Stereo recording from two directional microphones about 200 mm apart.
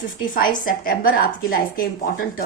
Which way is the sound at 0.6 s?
45° left (ahead or behind).